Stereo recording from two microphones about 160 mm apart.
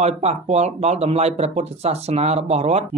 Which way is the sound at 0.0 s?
40° right (ahead or behind).